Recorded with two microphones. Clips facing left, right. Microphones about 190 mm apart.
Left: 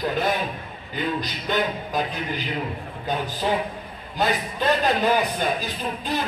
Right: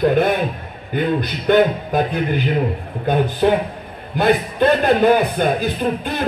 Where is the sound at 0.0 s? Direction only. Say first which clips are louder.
Right 8 dB; 60° right (ahead or behind).